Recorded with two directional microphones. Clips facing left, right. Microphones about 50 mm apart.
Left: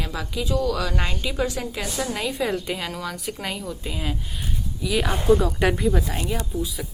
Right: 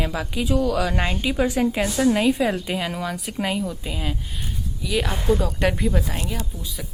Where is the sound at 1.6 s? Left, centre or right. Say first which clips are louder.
Right 8 dB; right.